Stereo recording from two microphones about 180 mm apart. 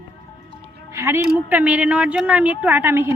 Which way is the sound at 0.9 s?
15° right (ahead or behind).